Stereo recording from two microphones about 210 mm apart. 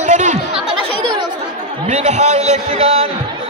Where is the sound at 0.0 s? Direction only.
35° right (ahead or behind).